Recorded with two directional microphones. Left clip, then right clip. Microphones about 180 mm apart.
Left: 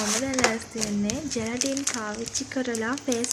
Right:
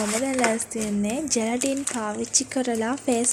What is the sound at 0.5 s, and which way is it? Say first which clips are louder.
Speech: right 2 dB; 45° right (ahead or behind).